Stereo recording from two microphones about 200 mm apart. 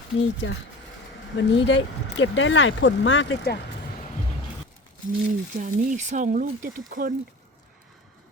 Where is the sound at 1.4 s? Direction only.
65° left (ahead or behind).